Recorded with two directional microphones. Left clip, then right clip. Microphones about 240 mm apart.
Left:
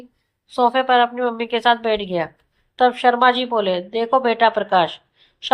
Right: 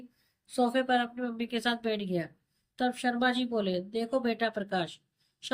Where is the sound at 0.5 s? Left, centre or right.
Centre.